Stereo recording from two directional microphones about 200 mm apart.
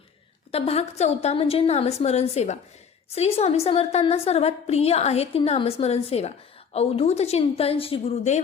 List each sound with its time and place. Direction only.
0.5 s a woman's voice: 30° left (ahead or behind)